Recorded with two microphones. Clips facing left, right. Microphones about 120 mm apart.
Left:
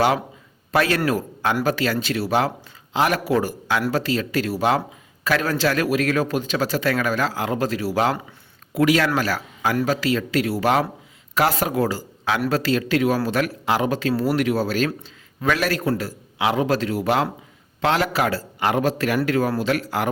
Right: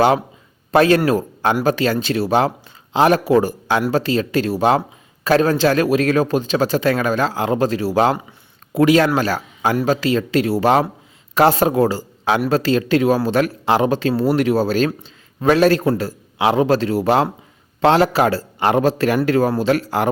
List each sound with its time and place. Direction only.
0.7 s a man's voice: 25° right (ahead or behind)